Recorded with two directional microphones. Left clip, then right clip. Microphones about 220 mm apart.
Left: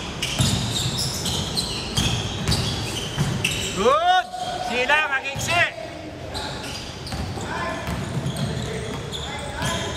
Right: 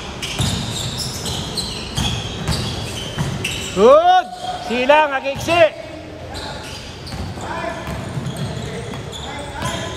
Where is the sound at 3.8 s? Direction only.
20° right (ahead or behind).